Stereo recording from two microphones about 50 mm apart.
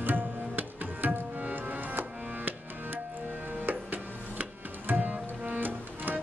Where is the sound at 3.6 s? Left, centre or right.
Right.